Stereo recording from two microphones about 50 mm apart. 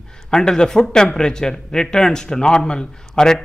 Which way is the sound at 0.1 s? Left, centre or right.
Centre.